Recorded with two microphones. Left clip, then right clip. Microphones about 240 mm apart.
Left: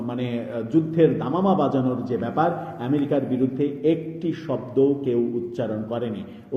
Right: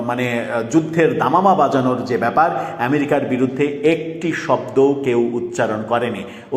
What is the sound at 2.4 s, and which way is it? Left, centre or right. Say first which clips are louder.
A man's voice: right 5 dB; right.